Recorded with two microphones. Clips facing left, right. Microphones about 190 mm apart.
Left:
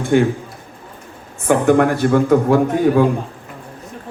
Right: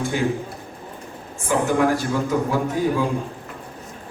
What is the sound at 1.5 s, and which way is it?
A man's voice, 60° left (ahead or behind).